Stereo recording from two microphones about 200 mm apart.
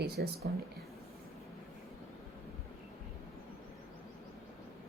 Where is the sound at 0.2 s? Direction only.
50° right (ahead or behind).